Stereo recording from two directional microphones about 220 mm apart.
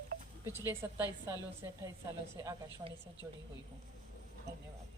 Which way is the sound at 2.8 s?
30° right (ahead or behind).